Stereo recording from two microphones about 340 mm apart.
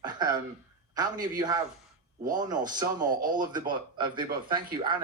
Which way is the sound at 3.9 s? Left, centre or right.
Centre.